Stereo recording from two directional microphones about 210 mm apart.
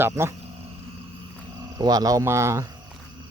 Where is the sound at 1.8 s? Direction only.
20° right (ahead or behind).